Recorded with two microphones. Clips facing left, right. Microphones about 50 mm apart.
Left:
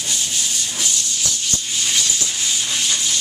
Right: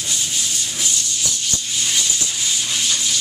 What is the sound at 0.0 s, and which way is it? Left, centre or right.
Rub, centre.